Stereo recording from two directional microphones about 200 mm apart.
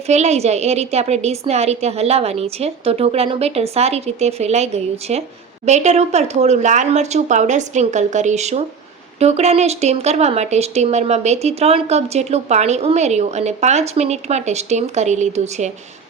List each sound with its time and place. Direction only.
0.1 s speech: 35° right (ahead or behind)